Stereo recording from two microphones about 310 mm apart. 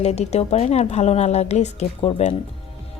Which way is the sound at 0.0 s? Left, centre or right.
Left.